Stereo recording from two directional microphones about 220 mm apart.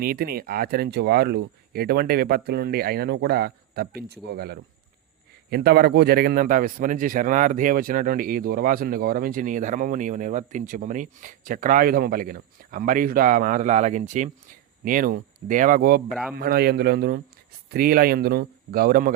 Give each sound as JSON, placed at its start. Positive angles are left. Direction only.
{"t": 0.0, "sound": "a man's voice", "side_deg": -45}